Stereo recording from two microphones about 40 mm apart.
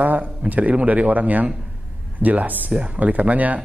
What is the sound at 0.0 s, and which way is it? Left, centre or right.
A man's voice, right.